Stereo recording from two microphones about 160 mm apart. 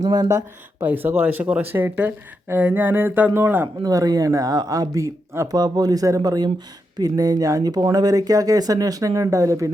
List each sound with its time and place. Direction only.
0.0 s speech: 25° right (ahead or behind)
3.8 s speech: 25° right (ahead or behind)